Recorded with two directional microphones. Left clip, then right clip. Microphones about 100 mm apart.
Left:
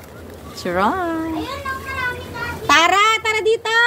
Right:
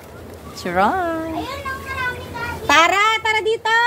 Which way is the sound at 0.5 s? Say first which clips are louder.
Right 1 dB; 50° right (ahead or behind).